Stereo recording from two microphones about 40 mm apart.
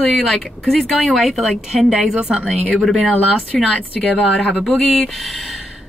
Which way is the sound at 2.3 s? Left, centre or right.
Centre.